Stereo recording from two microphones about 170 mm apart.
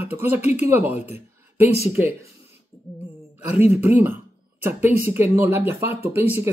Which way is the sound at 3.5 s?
40° left (ahead or behind).